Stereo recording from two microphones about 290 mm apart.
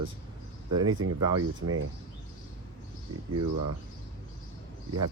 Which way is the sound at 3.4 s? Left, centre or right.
Right.